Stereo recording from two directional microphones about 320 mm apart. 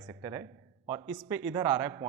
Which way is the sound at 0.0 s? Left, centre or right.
Centre.